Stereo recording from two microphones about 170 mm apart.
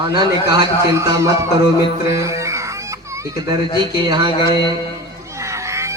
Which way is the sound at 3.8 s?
25° right (ahead or behind).